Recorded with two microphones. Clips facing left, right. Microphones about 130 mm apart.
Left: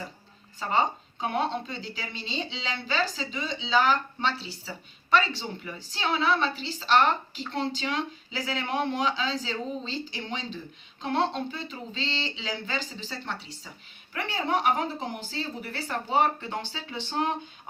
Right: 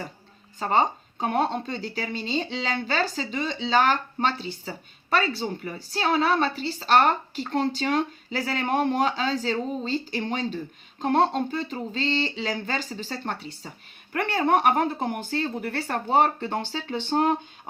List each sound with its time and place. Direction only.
0.6 s speech: 45° right (ahead or behind)